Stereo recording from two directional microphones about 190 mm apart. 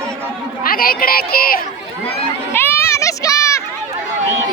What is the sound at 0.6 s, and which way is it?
Speech, 50° left (ahead or behind).